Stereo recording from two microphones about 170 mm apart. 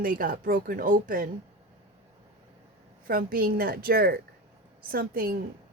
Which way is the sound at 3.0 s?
60° right (ahead or behind).